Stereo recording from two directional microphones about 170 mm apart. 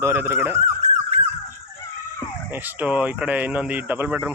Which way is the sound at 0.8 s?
40° right (ahead or behind).